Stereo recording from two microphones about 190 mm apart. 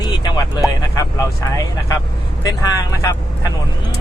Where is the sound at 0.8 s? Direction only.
15° left (ahead or behind).